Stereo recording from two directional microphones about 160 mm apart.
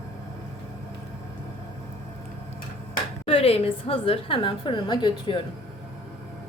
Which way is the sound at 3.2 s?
40° left (ahead or behind).